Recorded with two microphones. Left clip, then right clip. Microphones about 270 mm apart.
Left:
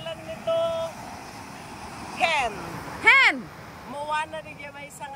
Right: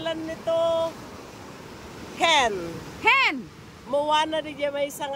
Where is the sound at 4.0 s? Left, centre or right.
Right.